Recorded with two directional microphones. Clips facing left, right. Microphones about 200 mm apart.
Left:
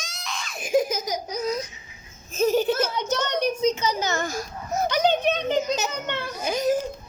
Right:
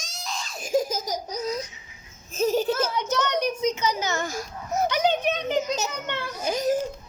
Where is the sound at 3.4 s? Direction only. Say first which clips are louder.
Left 2 dB; 30° left (ahead or behind).